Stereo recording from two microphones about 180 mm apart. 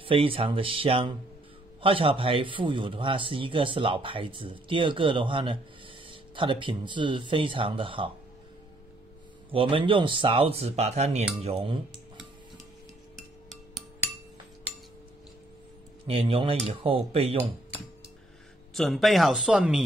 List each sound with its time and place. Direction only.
0.0 s a man's voice: 30° right (ahead or behind)
9.5 s a man's voice: 30° right (ahead or behind)
16.1 s speech: 30° right (ahead or behind)
18.8 s speech: centre (ahead or behind)